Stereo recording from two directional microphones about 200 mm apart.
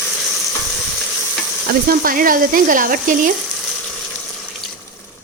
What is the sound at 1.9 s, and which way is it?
Speech, 45° right (ahead or behind).